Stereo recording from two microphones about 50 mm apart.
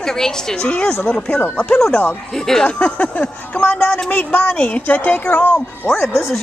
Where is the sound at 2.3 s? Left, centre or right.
Centre.